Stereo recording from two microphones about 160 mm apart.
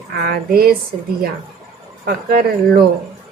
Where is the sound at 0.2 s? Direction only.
70° right (ahead or behind).